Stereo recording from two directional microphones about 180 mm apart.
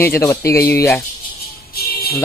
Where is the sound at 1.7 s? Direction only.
60° left (ahead or behind).